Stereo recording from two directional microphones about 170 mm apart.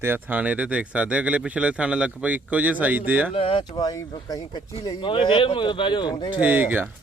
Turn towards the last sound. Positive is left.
turn(degrees=-10)  # may be behind; listen again after turning